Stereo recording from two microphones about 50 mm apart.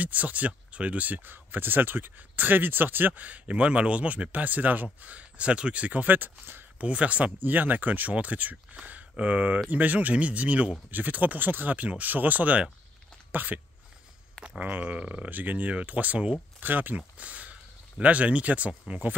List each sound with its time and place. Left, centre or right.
0.0 s speech: right
6.8 s speech: right
14.6 s speech: right